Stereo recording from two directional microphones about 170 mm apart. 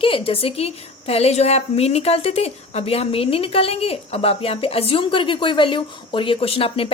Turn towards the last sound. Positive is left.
turn(degrees=35)  # may be behind; listen again after turning